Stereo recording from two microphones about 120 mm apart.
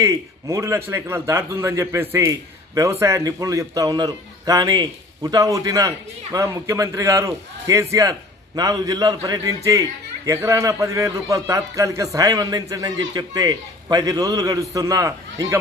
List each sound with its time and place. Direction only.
0.0 s a man's voice: 25° right (ahead or behind)